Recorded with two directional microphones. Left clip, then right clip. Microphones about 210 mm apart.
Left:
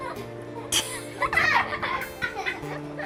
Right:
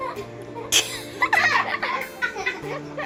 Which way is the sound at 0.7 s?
5° right (ahead or behind).